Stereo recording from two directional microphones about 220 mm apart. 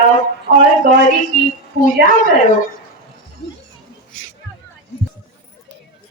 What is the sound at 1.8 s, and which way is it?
Speech, 35° left (ahead or behind).